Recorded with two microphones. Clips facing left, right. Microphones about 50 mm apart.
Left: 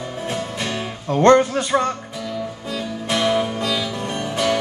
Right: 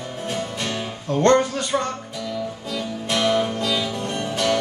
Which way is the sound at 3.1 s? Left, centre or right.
Centre.